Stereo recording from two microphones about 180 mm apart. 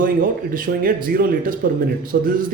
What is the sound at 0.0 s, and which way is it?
Speech, 50° right (ahead or behind).